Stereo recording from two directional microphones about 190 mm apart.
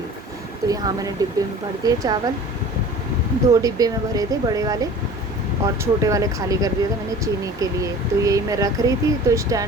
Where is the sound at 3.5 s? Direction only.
20° right (ahead or behind).